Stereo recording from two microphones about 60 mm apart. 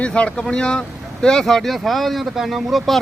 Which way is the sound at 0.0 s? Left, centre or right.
Centre.